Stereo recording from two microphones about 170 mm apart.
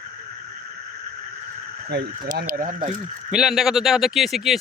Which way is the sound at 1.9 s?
75° right (ahead or behind).